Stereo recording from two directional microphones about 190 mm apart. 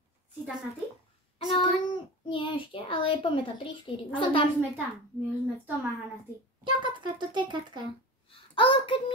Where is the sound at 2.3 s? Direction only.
25° left (ahead or behind).